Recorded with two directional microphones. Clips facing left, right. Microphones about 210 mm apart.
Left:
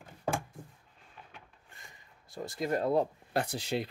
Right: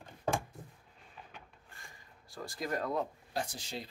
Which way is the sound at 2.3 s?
20° left (ahead or behind).